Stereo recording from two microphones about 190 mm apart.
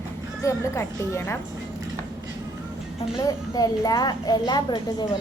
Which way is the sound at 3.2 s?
20° left (ahead or behind).